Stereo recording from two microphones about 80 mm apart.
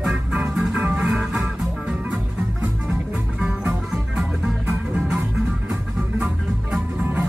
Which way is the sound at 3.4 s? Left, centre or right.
Centre.